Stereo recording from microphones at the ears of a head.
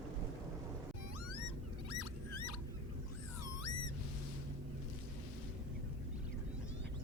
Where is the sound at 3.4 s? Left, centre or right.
Left.